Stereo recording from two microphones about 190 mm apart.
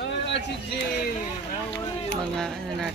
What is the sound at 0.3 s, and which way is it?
Speech, 65° left (ahead or behind).